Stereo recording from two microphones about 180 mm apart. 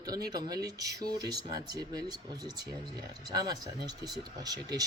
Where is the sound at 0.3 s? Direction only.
20° right (ahead or behind).